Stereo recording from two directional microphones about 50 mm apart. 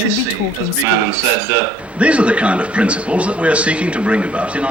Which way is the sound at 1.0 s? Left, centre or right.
Right.